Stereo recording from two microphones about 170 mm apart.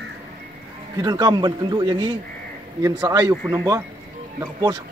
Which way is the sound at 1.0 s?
25° right (ahead or behind).